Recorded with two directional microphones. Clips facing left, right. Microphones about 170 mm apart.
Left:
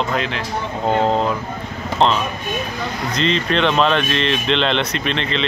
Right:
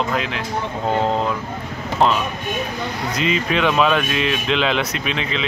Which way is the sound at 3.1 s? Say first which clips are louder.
Left 2 dB; 5° right (ahead or behind).